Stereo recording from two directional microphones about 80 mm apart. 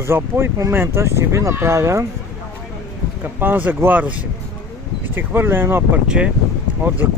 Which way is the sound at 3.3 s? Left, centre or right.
Right.